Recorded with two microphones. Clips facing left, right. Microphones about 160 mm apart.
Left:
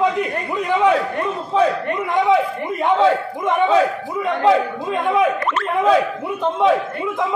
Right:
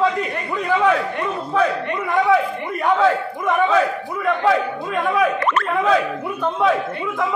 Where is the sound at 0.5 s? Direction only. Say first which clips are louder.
Left 1 dB; 15° left (ahead or behind).